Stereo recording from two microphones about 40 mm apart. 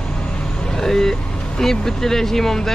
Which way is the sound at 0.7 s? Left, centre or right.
Centre.